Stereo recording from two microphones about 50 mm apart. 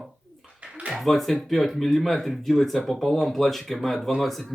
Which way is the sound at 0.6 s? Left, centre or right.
Right.